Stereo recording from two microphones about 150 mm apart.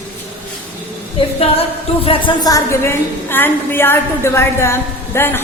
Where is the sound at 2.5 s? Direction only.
20° left (ahead or behind).